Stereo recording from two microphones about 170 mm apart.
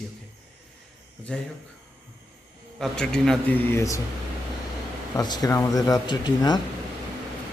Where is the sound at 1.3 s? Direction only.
5° left (ahead or behind).